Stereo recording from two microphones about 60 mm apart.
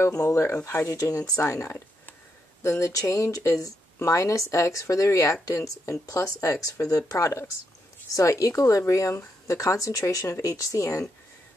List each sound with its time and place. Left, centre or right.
0.4 s speech: left
0.9 s speech: left
1.4 s speech: left